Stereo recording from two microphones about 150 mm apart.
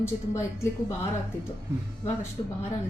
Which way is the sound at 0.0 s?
20° left (ahead or behind).